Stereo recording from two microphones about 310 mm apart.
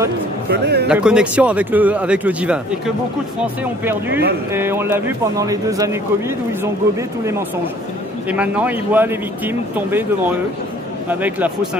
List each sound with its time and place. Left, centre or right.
0.5 s speech: right
0.8 s speech: centre
4.5 s speech: centre